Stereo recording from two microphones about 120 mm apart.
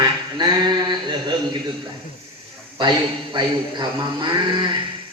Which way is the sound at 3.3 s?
40° right (ahead or behind).